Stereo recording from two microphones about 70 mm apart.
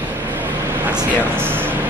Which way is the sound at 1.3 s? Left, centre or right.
Right.